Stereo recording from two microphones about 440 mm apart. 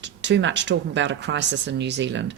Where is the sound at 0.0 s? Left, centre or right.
Right.